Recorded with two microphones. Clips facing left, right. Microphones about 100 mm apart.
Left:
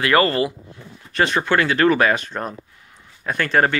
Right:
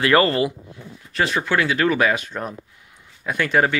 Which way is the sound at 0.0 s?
25° right (ahead or behind).